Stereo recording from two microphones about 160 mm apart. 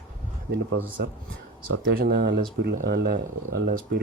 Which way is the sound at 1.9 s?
80° right.